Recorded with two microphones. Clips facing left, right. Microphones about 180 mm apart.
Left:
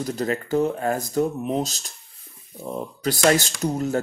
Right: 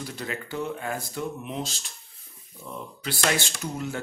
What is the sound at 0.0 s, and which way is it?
Speech, 45° left (ahead or behind).